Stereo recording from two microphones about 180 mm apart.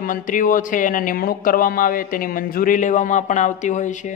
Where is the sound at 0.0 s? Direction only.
50° left (ahead or behind).